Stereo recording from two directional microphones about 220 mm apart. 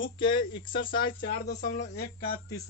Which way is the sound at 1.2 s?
45° left (ahead or behind).